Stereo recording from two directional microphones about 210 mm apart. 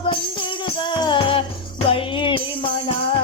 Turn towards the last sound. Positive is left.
turn(degrees=25)  # may be behind; listen again after turning